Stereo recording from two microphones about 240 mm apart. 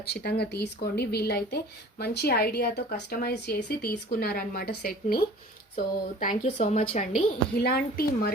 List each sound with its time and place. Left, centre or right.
0.1 s speech: left
7.5 s speech: left